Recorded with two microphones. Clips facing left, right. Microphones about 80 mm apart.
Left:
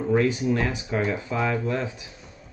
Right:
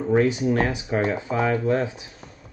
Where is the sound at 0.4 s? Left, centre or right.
Right.